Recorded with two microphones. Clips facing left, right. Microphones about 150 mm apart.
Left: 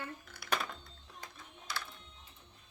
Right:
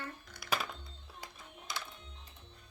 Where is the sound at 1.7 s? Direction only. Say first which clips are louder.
Left 1 dB; 10° right (ahead or behind).